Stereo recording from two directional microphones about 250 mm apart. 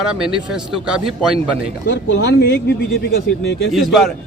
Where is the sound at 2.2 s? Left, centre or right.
Left.